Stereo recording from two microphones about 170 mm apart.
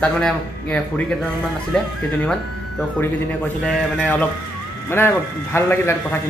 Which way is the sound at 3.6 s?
5° left (ahead or behind).